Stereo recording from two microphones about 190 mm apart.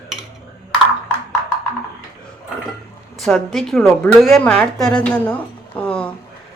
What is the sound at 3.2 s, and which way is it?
A woman's voice, centre (ahead or behind).